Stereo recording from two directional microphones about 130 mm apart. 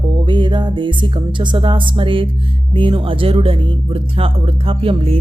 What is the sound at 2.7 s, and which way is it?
Speech, 40° right (ahead or behind).